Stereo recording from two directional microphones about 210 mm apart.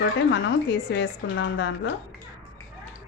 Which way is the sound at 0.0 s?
55° left (ahead or behind).